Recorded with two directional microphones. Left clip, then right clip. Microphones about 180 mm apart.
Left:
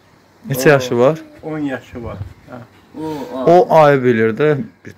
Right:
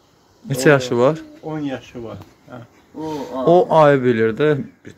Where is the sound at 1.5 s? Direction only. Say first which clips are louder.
Left 4 dB; 20° right (ahead or behind).